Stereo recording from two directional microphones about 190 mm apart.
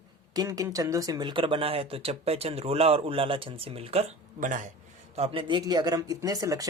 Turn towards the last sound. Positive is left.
turn(degrees=-20)  # may be behind; listen again after turning